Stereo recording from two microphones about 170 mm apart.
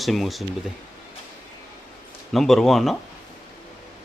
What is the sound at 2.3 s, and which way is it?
Speech, centre (ahead or behind).